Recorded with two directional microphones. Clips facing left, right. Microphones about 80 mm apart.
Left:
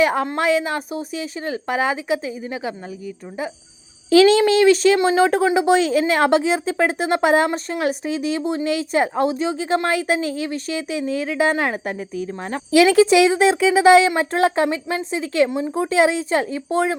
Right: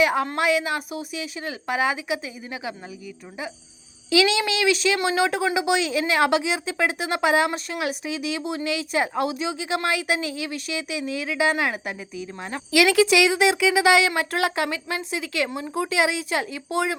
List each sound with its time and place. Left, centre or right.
0.0 s a woman's voice: left
4.1 s a woman's voice: left